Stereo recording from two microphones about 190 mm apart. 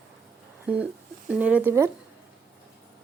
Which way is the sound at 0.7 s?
5° right (ahead or behind).